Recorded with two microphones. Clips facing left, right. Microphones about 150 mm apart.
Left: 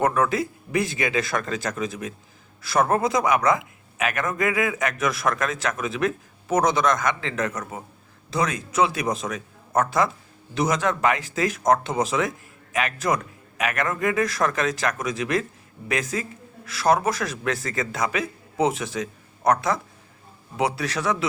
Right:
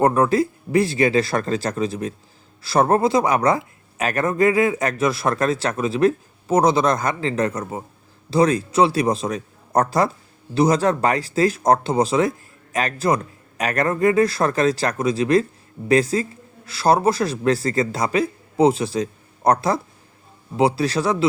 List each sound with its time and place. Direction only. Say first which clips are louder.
0.0 s speech: right 5 dB; 30° right (ahead or behind)